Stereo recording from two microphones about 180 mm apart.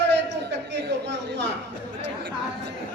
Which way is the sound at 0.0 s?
75° right (ahead or behind).